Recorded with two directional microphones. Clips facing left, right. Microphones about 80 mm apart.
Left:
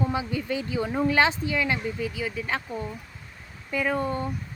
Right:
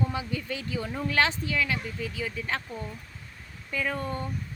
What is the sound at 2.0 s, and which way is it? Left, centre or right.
A woman's voice, centre.